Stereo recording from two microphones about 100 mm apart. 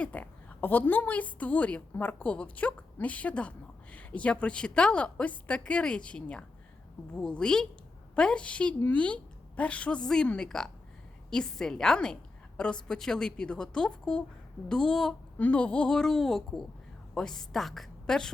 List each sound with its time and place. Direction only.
0.0 s a woman's voice: 15° left (ahead or behind)